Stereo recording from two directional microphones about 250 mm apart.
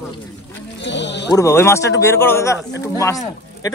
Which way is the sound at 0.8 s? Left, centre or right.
Left.